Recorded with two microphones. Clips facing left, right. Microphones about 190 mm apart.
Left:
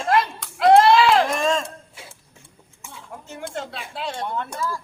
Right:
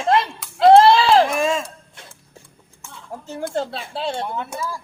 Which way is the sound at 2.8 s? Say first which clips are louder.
Even; 10° left (ahead or behind).